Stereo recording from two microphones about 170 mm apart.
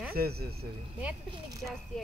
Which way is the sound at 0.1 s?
65° right (ahead or behind).